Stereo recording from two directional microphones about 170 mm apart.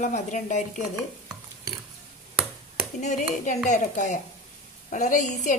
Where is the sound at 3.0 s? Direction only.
45° left (ahead or behind).